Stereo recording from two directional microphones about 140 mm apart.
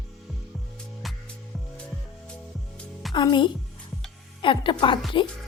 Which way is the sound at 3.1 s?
35° left (ahead or behind).